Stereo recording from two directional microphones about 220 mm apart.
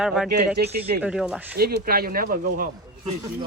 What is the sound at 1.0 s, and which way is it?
Speech, 5° right (ahead or behind).